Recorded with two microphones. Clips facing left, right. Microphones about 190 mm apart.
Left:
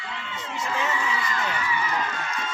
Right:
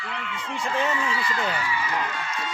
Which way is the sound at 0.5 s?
30° right (ahead or behind).